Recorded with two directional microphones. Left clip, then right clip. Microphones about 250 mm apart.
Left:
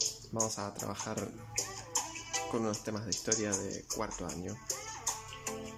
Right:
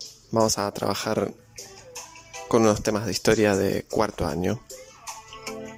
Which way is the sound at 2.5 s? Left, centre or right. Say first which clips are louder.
Right 19 dB; right.